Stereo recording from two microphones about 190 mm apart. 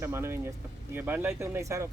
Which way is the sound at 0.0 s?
15° right (ahead or behind).